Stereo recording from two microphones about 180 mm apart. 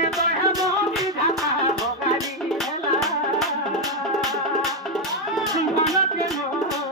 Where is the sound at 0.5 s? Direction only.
20° right (ahead or behind).